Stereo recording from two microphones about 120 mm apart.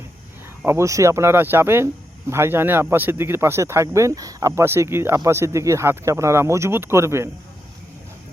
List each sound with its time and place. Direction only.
0.6 s speech: 20° right (ahead or behind)